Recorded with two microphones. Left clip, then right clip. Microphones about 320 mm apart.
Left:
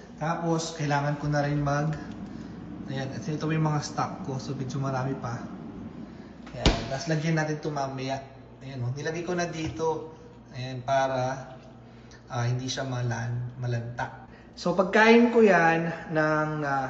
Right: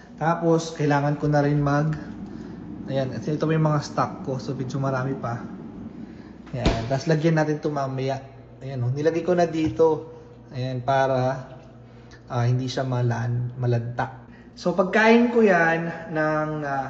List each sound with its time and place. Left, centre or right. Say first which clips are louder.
0.2 s a man's voice: right 7 dB; centre
7.2 s a man's voice: right 7 dB; centre